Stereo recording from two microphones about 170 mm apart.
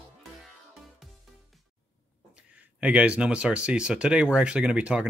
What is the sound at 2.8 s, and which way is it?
Speech, 5° right (ahead or behind).